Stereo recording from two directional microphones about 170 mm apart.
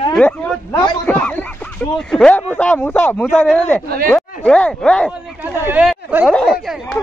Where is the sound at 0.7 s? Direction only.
25° left (ahead or behind).